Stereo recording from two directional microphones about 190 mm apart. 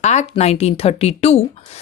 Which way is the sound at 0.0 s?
35° left (ahead or behind).